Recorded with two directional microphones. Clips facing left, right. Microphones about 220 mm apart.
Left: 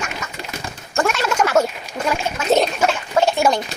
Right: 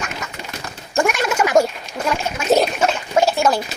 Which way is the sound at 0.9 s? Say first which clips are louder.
Right 1 dB; 15° right (ahead or behind).